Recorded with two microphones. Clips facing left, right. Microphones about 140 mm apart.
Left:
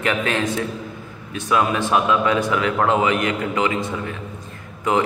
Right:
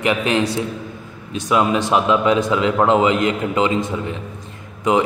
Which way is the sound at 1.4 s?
20° right (ahead or behind).